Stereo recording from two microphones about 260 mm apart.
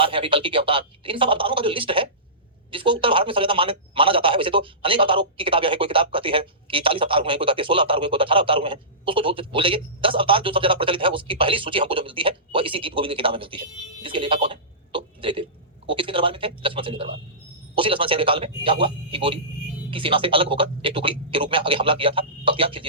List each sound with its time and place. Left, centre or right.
0.0 s a man's voice: centre